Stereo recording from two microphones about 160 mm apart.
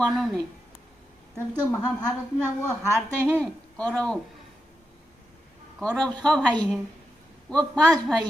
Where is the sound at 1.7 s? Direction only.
20° left (ahead or behind).